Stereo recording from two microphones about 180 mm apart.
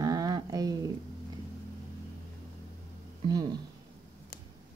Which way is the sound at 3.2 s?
25° right (ahead or behind).